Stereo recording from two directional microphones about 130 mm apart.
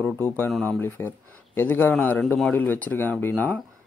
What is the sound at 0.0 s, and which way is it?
Speech, 15° left (ahead or behind).